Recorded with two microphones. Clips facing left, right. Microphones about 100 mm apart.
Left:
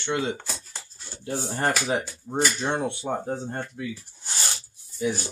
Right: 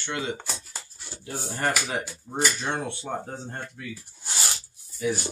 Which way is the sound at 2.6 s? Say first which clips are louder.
Left 3 dB; 20° left (ahead or behind).